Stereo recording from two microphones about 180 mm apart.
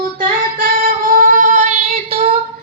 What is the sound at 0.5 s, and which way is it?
Child singing, 50° right (ahead or behind).